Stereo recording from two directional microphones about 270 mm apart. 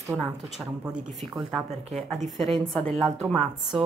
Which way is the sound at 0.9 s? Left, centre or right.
Right.